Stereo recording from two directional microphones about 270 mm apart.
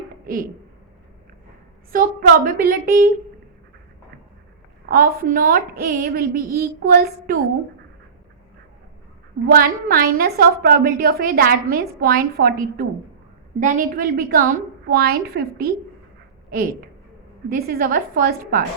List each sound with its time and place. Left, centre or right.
1.9 s a woman's voice: right
4.9 s a woman's voice: right
9.5 s a woman's voice: right